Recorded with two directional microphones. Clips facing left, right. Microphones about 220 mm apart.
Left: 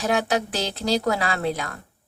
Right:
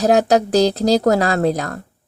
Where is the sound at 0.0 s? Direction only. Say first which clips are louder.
Right 9 dB; 40° right (ahead or behind).